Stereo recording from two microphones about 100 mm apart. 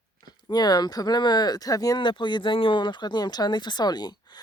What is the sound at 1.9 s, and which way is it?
Speech, 55° left (ahead or behind).